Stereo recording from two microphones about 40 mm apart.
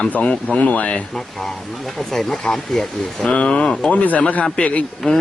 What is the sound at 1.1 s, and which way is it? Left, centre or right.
A man's voice, centre.